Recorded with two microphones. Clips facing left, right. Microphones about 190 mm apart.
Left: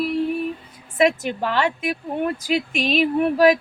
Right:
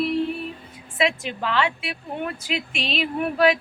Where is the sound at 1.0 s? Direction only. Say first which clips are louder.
Left 5 dB; 45° left (ahead or behind).